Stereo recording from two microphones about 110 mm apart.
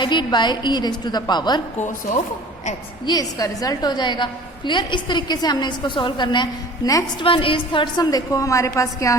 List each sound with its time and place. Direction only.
0.0 s a woman's voice: 45° left (ahead or behind)
3.1 s a woman's voice: 35° left (ahead or behind)
7.2 s a woman's voice: 55° left (ahead or behind); by 9.1 s 30° left (ahead or behind)